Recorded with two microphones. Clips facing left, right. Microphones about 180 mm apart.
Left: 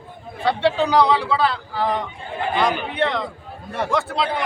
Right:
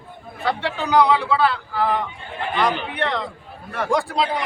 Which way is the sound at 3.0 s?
20° left (ahead or behind).